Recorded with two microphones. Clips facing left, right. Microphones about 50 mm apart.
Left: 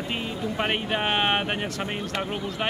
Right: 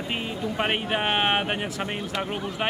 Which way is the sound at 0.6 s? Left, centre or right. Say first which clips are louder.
Right 1 dB; centre.